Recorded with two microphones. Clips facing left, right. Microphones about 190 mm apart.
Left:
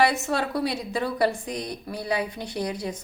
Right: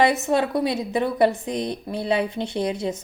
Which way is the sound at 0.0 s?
20° right (ahead or behind).